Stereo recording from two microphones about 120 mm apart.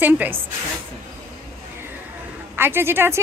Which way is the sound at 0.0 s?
15° right (ahead or behind).